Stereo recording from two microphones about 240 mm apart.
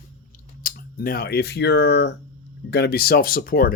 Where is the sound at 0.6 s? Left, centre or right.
Left.